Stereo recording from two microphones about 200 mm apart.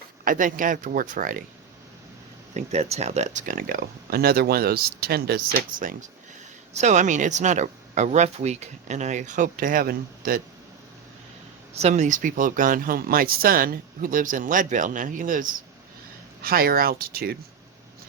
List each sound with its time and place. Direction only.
0.3 s speech: 40° right (ahead or behind)
2.6 s speech: 35° right (ahead or behind)
11.7 s speech: 35° right (ahead or behind); by 17.3 s 50° right (ahead or behind)